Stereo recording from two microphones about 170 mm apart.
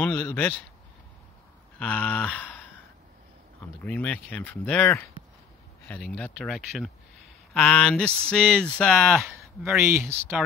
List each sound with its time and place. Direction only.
0.0 s speech: 10° left (ahead or behind)
1.8 s speech: 5° left (ahead or behind)
3.8 s speech: 10° left (ahead or behind)
9.4 s a sound: centre (ahead or behind)
9.8 s speech: 15° right (ahead or behind)